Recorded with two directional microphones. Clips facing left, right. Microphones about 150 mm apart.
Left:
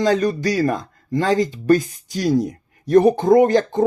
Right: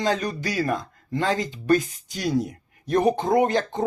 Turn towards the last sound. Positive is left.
turn(degrees=45)  # may be behind; listen again after turning